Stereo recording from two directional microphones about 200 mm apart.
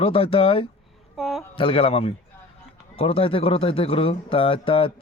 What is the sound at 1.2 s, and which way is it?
Speech, centre (ahead or behind).